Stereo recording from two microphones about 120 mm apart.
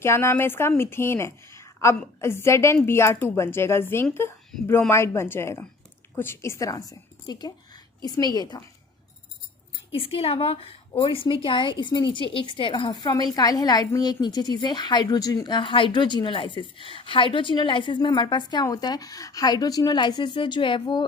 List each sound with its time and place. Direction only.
0.0 s a woman's voice: 20° left (ahead or behind)
9.9 s a woman's voice: 50° left (ahead or behind)